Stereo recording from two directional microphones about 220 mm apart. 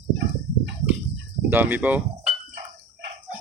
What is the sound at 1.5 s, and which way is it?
Speech, 10° right (ahead or behind).